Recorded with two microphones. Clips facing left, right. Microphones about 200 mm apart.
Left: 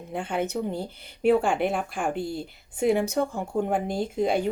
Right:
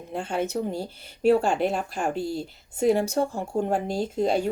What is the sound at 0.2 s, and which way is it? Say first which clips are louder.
Speech: right 1 dB; 55° left (ahead or behind).